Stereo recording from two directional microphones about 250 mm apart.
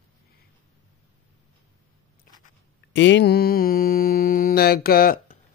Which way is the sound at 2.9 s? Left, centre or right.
Left.